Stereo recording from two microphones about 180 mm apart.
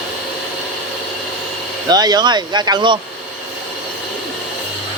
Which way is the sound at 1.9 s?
20° right (ahead or behind).